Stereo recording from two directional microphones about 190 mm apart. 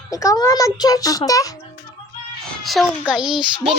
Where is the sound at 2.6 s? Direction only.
Centre (ahead or behind).